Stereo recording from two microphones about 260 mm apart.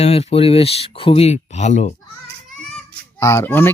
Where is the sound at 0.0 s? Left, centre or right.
Left.